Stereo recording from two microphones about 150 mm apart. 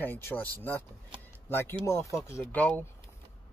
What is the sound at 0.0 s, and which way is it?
Speech, 15° left (ahead or behind).